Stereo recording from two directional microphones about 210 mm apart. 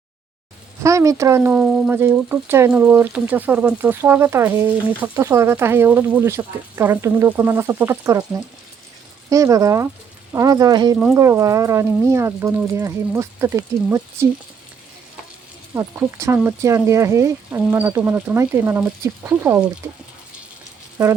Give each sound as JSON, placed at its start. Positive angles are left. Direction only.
{"t": 0.8, "sound": "speech", "side_deg": -15}
{"t": 9.3, "sound": "speech", "side_deg": -15}
{"t": 15.7, "sound": "speech", "side_deg": -15}